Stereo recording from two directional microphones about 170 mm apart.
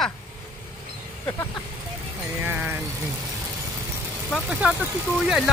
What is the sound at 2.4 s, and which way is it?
Vehicle, 10° right (ahead or behind).